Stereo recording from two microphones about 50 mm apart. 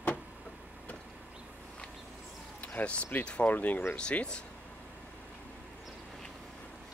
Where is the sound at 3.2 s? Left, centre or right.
Centre.